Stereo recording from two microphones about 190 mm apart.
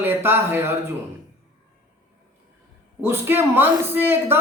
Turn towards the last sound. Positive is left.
turn(degrees=-10)  # may be behind; listen again after turning